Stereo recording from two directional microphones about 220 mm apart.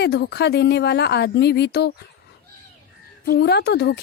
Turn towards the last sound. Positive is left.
turn(degrees=50)  # may be behind; listen again after turning